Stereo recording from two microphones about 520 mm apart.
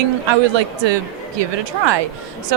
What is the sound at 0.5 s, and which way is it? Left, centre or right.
A woman's voice, right.